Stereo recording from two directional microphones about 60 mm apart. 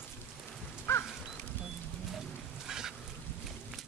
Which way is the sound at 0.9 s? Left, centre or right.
Left.